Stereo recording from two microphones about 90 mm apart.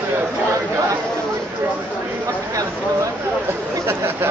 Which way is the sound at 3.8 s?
25° right (ahead or behind).